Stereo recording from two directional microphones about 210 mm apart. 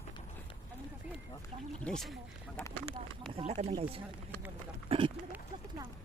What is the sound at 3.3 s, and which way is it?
Speech, 30° right (ahead or behind).